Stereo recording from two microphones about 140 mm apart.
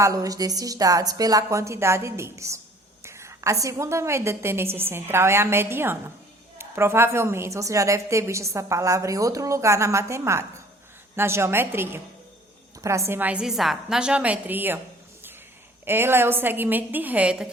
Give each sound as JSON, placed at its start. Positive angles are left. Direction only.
{"t": 0.0, "sound": "a woman's voice", "side_deg": -25}
{"t": 15.9, "sound": "a woman's voice", "side_deg": -15}